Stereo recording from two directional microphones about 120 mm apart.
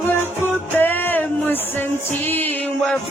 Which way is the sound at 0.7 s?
15° left (ahead or behind).